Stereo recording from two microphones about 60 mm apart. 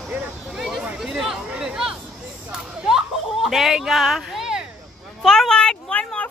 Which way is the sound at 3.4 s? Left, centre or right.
Centre.